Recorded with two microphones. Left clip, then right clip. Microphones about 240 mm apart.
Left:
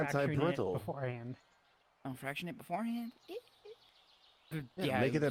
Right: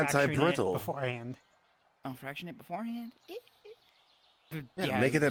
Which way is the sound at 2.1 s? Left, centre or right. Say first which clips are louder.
Even; centre.